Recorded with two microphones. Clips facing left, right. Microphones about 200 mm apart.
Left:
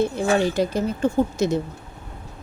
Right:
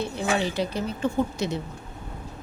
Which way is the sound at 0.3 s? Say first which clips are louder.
Left 6 dB; 45° left (ahead or behind).